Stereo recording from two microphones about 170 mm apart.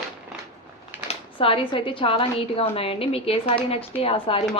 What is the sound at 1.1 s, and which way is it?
A woman's voice, 30° left (ahead or behind).